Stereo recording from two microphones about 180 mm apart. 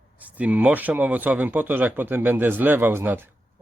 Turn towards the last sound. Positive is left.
turn(degrees=-10)  # may be behind; listen again after turning